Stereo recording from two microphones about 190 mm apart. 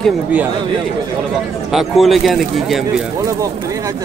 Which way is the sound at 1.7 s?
Centre (ahead or behind).